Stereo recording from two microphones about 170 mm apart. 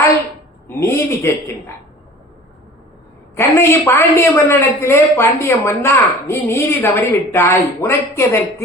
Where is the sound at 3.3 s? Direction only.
15° left (ahead or behind).